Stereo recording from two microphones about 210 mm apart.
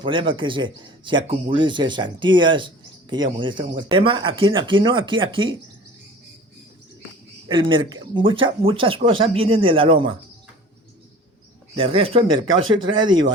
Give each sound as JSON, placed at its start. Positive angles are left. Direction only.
{"t": 0.0, "sound": "speech", "side_deg": -25}
{"t": 7.4, "sound": "speech", "side_deg": -25}
{"t": 11.8, "sound": "speech", "side_deg": -25}
{"t": 12.5, "sound": "speech", "side_deg": -70}